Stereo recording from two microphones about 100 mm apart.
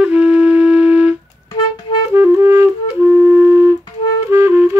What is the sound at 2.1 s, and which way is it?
Music, 25° right (ahead or behind).